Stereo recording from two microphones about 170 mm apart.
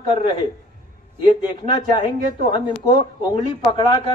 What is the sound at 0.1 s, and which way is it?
Speech, 30° left (ahead or behind).